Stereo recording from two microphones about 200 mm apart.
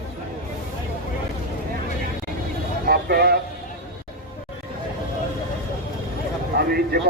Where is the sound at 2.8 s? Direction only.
50° right (ahead or behind).